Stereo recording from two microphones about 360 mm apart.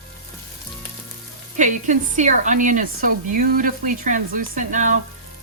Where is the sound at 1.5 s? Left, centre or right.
Right.